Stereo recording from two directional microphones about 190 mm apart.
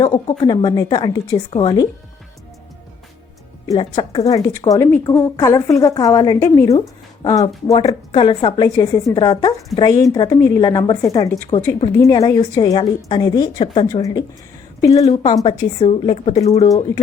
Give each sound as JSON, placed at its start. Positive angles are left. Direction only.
{"t": 0.0, "sound": "speech", "side_deg": 20}
{"t": 3.7, "sound": "speech", "side_deg": 25}
{"t": 4.3, "sound": "a woman's voice", "side_deg": 15}
{"t": 14.8, "sound": "a woman's voice", "side_deg": 35}